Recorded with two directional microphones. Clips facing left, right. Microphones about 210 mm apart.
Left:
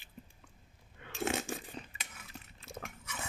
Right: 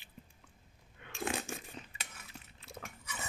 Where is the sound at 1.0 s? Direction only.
30° left (ahead or behind).